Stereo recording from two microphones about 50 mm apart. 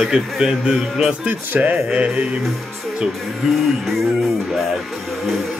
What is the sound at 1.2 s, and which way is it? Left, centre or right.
Speech, right.